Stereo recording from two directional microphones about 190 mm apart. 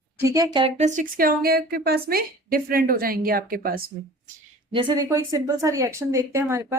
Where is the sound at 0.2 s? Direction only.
15° right (ahead or behind); by 3.9 s 50° right (ahead or behind).